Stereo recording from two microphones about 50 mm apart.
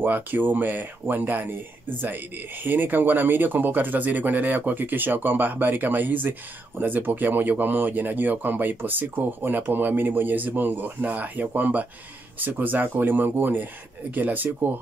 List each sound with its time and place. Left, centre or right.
0.0 s speech: right